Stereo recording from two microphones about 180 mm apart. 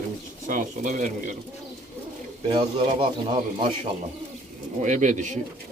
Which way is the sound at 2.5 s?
30° right (ahead or behind).